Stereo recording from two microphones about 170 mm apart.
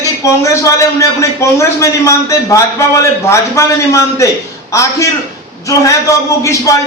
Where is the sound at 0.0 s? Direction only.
20° left (ahead or behind).